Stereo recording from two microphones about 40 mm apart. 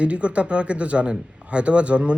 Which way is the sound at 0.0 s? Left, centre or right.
Right.